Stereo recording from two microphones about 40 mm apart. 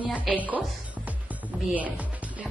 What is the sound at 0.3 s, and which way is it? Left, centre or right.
Speech, right.